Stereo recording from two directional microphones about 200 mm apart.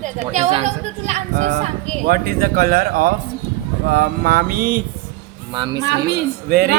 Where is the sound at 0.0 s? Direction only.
35° right (ahead or behind).